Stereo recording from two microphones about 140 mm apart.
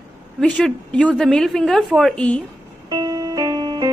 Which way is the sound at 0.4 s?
5° left (ahead or behind).